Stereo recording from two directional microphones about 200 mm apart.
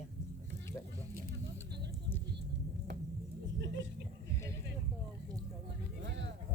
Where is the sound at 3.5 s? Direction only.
60° right (ahead or behind).